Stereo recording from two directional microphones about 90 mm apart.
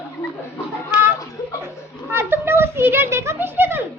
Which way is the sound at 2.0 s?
25° right (ahead or behind).